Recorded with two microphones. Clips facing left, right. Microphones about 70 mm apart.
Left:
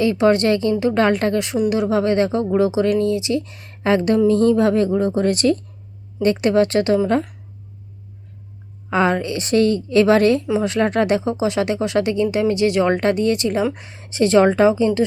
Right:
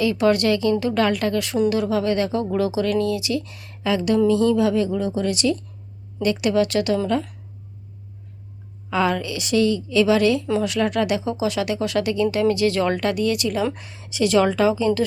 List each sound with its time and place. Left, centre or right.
0.0 s a woman's voice: left
8.9 s a woman's voice: left